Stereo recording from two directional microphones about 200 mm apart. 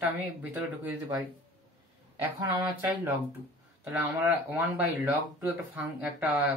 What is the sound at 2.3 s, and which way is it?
Speech, 20° right (ahead or behind).